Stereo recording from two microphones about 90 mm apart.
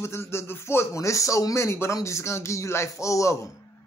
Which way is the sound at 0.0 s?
30° left (ahead or behind).